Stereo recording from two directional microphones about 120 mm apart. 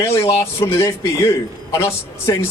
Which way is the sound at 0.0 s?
25° left (ahead or behind).